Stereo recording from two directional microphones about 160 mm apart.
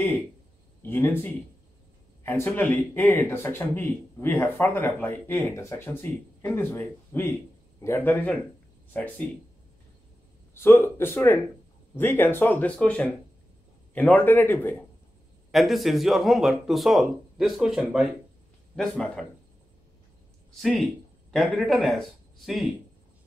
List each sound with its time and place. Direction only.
0.8 s speech: 15° left (ahead or behind)
10.5 s speech: 15° left (ahead or behind)
15.5 s speech: centre (ahead or behind)
20.5 s speech: centre (ahead or behind)